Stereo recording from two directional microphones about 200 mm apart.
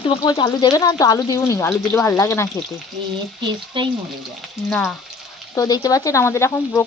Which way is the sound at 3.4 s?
25° right (ahead or behind).